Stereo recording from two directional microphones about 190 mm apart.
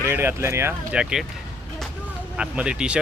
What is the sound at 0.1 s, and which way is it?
Speech, 10° right (ahead or behind).